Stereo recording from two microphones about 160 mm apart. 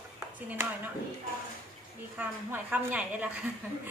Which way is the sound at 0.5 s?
15° right (ahead or behind).